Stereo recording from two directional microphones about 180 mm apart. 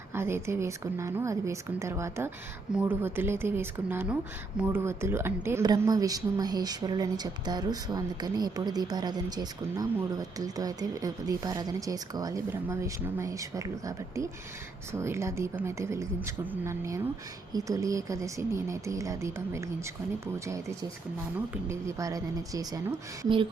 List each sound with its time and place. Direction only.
0.1 s a woman's voice: 15° right (ahead or behind)